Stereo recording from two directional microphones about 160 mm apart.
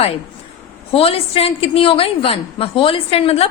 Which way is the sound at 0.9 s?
35° left (ahead or behind).